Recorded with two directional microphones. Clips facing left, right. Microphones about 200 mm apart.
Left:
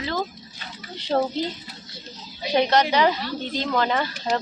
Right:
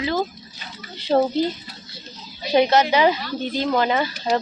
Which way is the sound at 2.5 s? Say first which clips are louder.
Right 3 dB; 10° right (ahead or behind).